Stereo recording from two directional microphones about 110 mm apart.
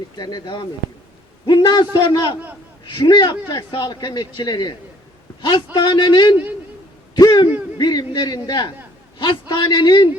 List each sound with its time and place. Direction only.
0.2 s a man's voice: 40° left (ahead or behind)
7.2 s a sound: 40° left (ahead or behind)
7.8 s a man's voice: 40° left (ahead or behind)